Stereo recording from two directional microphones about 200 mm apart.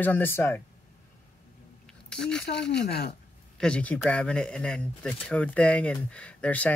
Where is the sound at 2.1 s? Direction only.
5° left (ahead or behind).